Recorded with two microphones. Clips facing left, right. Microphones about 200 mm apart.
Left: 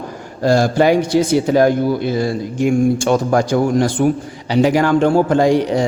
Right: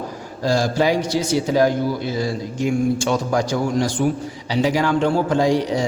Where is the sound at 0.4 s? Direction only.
60° left (ahead or behind).